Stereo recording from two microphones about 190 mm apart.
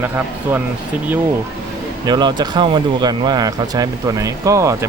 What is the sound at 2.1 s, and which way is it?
Speech, 20° right (ahead or behind).